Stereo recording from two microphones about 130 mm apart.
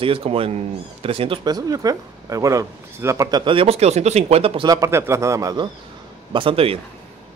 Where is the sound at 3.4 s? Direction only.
40° right (ahead or behind).